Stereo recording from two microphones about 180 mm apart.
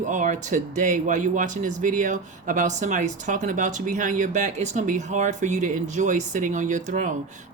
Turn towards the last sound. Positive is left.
turn(degrees=-45)  # may be behind; listen again after turning